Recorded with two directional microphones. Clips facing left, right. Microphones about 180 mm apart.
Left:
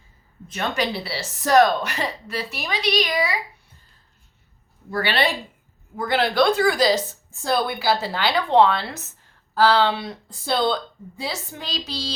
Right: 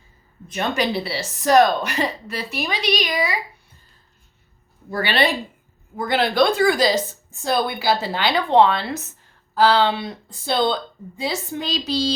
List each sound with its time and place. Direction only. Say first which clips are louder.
0.5 s speech: right 3 dB; 15° right (ahead or behind)
4.9 s a woman's voice: right 2 dB; 20° right (ahead or behind)